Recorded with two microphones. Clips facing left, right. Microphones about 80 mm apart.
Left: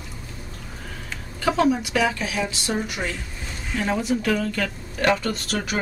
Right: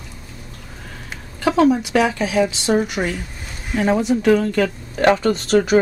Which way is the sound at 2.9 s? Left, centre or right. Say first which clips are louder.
Right 6 dB; centre.